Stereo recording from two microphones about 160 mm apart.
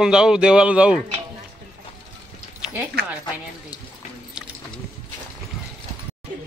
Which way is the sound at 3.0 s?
90° right.